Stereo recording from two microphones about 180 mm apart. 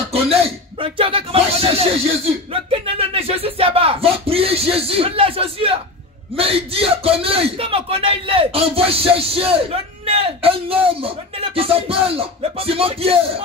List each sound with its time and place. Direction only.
0.1 s a man's voice: 35° right (ahead or behind)